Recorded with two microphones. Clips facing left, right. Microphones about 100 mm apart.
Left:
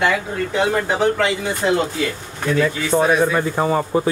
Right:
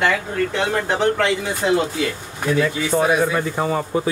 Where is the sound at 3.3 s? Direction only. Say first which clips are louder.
Left 2 dB; 35° left (ahead or behind).